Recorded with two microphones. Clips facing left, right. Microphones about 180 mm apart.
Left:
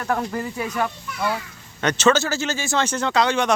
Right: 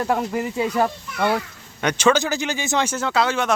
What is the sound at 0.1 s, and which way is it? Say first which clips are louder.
Speech: left 2 dB; 10° right (ahead or behind).